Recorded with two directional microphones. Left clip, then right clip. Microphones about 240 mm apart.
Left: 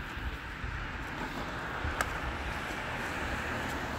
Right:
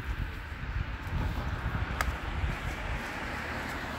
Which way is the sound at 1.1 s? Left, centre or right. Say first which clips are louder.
Even; left.